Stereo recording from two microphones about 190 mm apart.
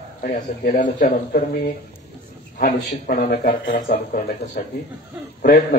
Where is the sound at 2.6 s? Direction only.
50° left (ahead or behind).